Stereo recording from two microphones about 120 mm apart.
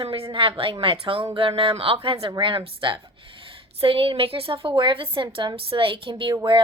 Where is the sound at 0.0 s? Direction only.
50° right (ahead or behind).